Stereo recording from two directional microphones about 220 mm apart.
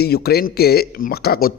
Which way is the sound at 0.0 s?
45° left (ahead or behind).